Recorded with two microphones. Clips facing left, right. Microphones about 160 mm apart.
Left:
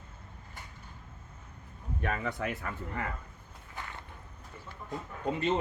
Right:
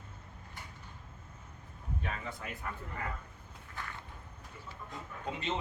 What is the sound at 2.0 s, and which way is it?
Speech, 65° left (ahead or behind).